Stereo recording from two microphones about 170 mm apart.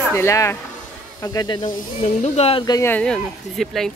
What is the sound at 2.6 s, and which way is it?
Speech, 20° left (ahead or behind).